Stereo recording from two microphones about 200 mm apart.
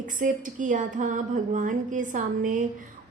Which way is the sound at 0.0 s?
40° right (ahead or behind).